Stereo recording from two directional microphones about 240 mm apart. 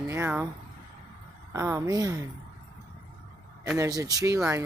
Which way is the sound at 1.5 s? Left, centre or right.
Centre.